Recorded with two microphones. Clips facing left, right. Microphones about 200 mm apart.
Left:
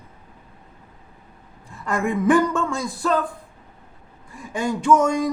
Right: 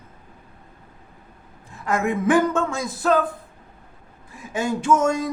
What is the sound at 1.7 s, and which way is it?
Speech, 20° right (ahead or behind).